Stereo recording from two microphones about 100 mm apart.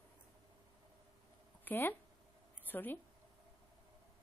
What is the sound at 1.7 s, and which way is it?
Speech, 20° left (ahead or behind).